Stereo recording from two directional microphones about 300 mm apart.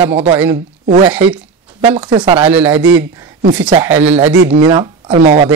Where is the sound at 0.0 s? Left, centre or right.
Centre.